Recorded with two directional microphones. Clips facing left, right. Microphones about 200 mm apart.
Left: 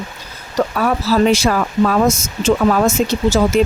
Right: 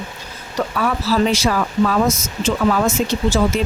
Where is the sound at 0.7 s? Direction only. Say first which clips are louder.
Left 2 dB; 45° left (ahead or behind).